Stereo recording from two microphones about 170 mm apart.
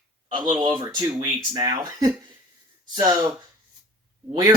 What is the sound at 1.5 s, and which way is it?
Speech, 25° right (ahead or behind).